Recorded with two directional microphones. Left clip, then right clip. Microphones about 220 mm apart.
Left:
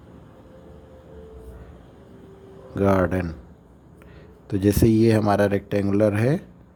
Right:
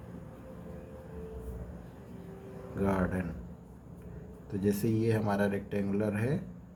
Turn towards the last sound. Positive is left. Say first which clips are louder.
# left 12 dB
turn(degrees=50)  # may be behind; listen again after turning